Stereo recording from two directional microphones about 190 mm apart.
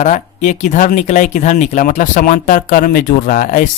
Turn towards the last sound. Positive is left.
turn(degrees=45)  # may be behind; listen again after turning